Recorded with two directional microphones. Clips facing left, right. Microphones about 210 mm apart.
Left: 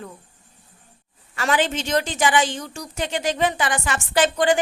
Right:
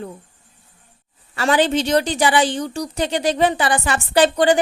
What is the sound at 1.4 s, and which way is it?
Speech, 35° right (ahead or behind).